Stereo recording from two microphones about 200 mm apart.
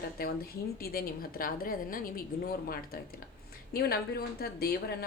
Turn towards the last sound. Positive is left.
turn(degrees=50)  # may be behind; listen again after turning